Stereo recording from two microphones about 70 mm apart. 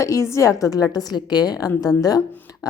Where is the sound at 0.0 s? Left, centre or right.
Left.